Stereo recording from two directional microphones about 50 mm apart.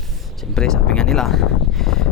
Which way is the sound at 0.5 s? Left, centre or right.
Centre.